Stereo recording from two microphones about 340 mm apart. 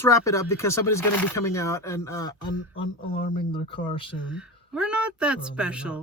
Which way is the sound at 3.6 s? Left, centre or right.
Centre.